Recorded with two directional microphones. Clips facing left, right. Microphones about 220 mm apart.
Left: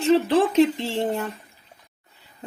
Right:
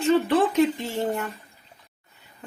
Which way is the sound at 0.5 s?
30° left (ahead or behind).